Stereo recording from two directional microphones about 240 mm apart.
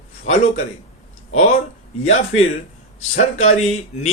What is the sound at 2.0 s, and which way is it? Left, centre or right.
Speech, left.